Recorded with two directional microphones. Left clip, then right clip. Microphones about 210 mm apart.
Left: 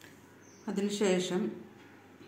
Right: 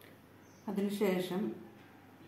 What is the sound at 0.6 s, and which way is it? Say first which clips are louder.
Speech: left 3 dB; 15° left (ahead or behind).